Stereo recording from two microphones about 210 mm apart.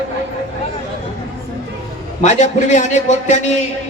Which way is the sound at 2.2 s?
35° left (ahead or behind).